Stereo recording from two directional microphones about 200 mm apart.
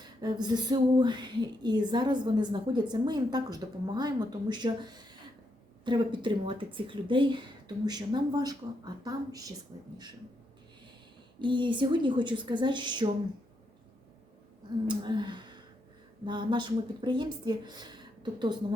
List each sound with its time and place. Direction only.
0.0 s speech: 20° right (ahead or behind)
11.3 s speech: 25° right (ahead or behind)
14.8 s speech: 20° right (ahead or behind)